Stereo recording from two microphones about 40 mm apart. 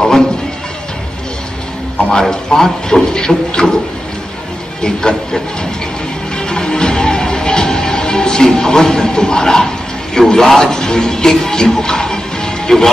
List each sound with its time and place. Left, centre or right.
2.0 s speech: centre
4.8 s speech: centre
6.3 s music: centre
10.1 s speech: centre